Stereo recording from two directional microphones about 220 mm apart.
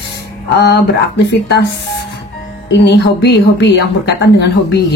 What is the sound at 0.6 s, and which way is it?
A woman's voice, 50° left (ahead or behind).